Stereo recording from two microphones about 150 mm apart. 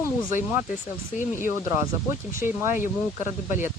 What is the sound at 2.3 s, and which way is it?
Speech, 15° right (ahead or behind).